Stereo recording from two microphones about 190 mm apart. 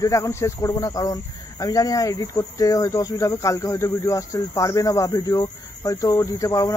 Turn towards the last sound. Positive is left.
turn(degrees=15)  # may be behind; listen again after turning